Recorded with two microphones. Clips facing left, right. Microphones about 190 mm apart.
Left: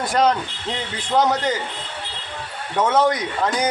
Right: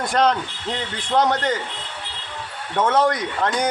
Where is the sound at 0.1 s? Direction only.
5° left (ahead or behind).